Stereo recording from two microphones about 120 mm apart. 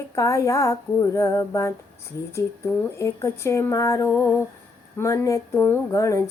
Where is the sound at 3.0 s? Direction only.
25° left (ahead or behind).